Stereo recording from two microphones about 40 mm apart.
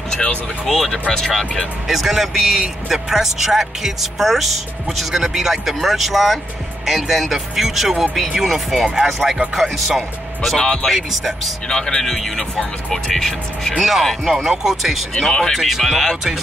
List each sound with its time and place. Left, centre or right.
0.7 s speech: centre
1.9 s a man's voice: centre
9.9 s speech: centre
10.9 s speech: centre
11.7 s speech: left
12.0 s speech: centre
13.7 s speech: centre
15.1 s speech: centre
15.5 s speech: centre